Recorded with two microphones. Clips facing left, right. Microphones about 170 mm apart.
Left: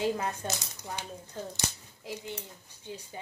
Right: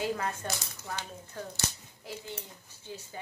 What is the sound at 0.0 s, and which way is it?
Speech, 20° left (ahead or behind).